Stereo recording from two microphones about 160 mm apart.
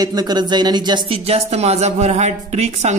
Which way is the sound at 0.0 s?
25° right (ahead or behind).